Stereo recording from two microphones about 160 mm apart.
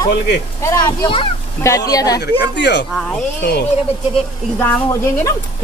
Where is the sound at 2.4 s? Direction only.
90° left.